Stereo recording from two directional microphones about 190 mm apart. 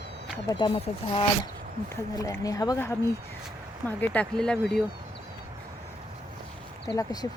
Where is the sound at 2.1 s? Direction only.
20° left (ahead or behind).